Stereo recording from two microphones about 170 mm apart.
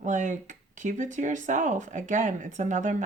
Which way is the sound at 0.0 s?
50° right (ahead or behind).